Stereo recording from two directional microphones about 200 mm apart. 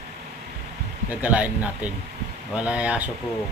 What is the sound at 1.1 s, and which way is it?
Speech, 5° right (ahead or behind).